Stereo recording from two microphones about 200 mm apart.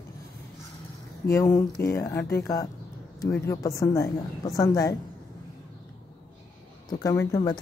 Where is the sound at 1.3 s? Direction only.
15° left (ahead or behind).